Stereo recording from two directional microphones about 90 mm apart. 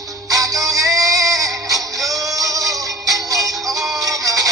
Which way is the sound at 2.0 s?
40° right (ahead or behind).